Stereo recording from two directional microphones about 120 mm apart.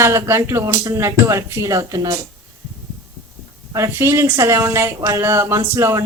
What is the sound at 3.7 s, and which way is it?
Speech, 25° right (ahead or behind).